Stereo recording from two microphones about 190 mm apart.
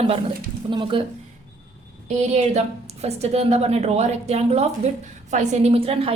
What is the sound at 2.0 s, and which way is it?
A woman's voice, 35° right (ahead or behind).